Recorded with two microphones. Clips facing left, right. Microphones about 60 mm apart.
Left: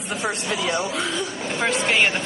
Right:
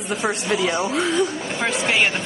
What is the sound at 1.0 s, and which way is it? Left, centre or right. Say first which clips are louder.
Speech: right 5 dB; centre.